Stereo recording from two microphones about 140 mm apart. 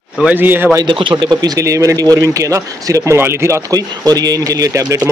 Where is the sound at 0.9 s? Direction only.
35° right (ahead or behind).